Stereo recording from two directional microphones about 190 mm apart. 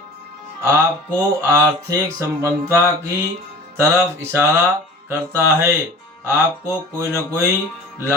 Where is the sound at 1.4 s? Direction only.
15° right (ahead or behind).